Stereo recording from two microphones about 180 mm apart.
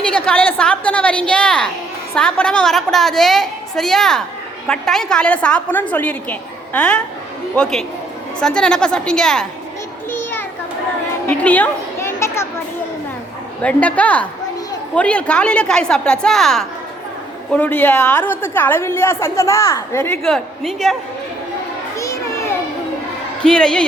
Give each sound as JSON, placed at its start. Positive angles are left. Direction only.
{"t": 0.1, "sound": "a woman's voice", "side_deg": 5}
{"t": 10.1, "sound": "children playing", "side_deg": 10}
{"t": 13.6, "sound": "a woman's voice", "side_deg": 5}
{"t": 20.2, "sound": "a woman's voice", "side_deg": 0}
{"t": 21.9, "sound": "children playing", "side_deg": 15}
{"t": 23.4, "sound": "a woman's voice", "side_deg": 5}